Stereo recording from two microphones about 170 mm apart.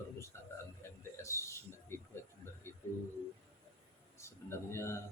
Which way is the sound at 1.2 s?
15° left (ahead or behind).